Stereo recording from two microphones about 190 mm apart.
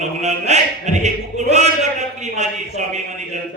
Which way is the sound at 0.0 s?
35° right (ahead or behind).